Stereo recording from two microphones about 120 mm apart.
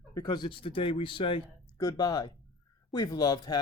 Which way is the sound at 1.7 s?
30° left (ahead or behind).